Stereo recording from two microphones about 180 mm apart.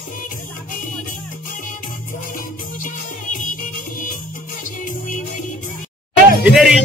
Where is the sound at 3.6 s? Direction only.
45° left (ahead or behind).